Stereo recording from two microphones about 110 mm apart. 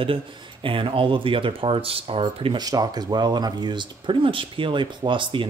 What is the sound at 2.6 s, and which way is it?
Speech, 35° right (ahead or behind).